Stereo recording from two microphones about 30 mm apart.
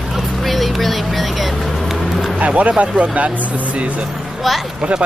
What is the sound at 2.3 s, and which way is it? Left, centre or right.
Speech, right.